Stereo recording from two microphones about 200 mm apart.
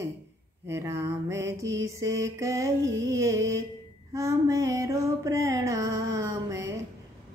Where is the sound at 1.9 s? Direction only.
15° right (ahead or behind).